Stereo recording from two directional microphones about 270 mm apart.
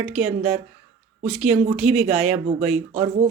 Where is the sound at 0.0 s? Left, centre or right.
Centre.